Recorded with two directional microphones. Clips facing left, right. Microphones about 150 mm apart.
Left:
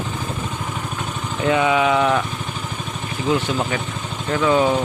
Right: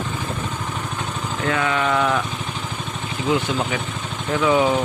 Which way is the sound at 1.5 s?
15° left (ahead or behind).